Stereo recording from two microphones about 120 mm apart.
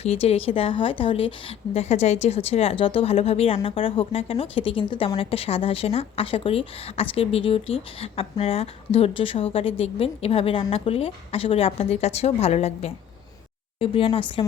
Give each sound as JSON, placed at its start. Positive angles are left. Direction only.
{"t": 0.0, "sound": "a woman's voice", "side_deg": 60}
{"t": 13.7, "sound": "a woman's voice", "side_deg": 50}